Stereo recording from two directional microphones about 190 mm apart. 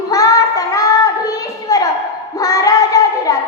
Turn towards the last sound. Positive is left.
turn(degrees=20)  # may be behind; listen again after turning